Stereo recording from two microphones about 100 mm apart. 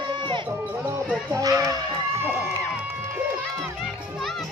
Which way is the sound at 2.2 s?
25° right (ahead or behind).